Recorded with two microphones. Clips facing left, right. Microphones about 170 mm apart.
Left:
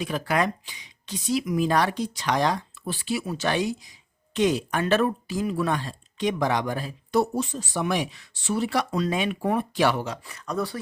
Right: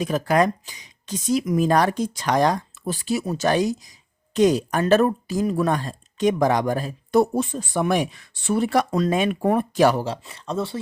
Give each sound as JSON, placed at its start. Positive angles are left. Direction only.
{"t": 0.0, "sound": "speech", "side_deg": -40}